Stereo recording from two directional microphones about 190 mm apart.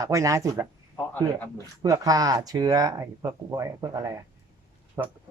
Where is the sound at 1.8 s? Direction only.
20° right (ahead or behind).